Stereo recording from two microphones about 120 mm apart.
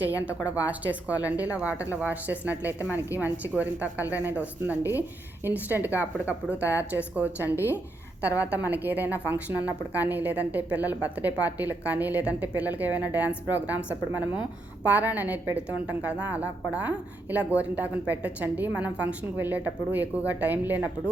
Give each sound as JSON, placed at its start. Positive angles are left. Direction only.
{"t": 0.4, "sound": "a woman's voice", "side_deg": -10}
{"t": 7.5, "sound": "a woman's voice", "side_deg": 20}
{"t": 8.4, "sound": "a woman's voice", "side_deg": -15}